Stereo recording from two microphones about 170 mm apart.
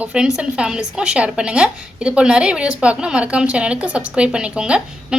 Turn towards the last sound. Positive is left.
turn(degrees=-5)  # may be behind; listen again after turning